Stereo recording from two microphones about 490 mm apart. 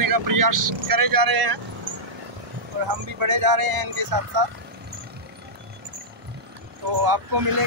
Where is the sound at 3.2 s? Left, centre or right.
Right.